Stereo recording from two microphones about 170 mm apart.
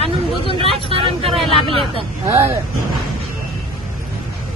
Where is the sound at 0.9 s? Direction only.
35° right (ahead or behind).